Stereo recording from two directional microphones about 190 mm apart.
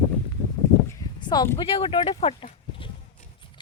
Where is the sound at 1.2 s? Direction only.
20° left (ahead or behind).